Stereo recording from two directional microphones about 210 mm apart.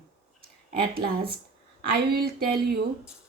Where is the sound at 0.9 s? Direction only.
45° right (ahead or behind).